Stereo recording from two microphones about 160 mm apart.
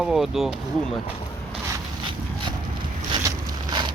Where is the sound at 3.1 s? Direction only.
30° right (ahead or behind).